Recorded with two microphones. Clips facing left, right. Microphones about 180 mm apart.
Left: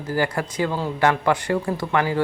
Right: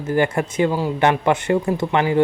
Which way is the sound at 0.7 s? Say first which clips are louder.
Right 3 dB; 10° right (ahead or behind).